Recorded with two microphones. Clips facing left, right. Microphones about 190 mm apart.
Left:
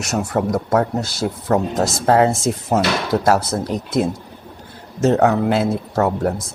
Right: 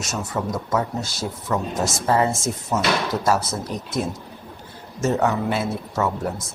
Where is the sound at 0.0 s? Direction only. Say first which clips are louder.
Left 6 dB; 65° left (ahead or behind).